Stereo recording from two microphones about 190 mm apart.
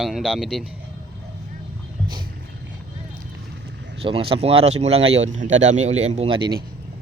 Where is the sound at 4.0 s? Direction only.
30° right (ahead or behind).